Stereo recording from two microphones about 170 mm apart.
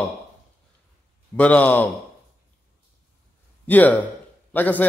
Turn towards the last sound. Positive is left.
turn(degrees=10)  # may be behind; listen again after turning